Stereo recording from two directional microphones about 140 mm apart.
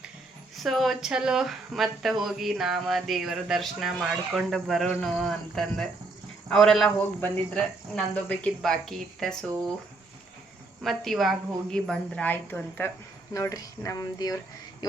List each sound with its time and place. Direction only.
0.5 s speech: centre (ahead or behind)
10.8 s a woman's voice: centre (ahead or behind)
13.3 s speech: 25° left (ahead or behind)